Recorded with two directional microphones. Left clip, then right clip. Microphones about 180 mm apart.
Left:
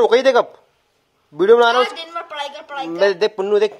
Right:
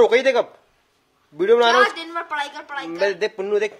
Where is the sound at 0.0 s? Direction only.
25° left (ahead or behind).